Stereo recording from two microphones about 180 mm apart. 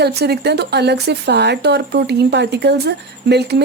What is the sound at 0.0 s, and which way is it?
A woman's voice, 65° right (ahead or behind).